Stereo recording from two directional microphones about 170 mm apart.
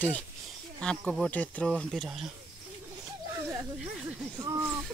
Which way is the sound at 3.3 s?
10° right (ahead or behind).